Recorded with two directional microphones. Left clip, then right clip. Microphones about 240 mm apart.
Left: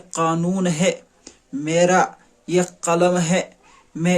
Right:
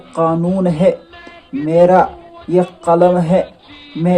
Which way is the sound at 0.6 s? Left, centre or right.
Centre.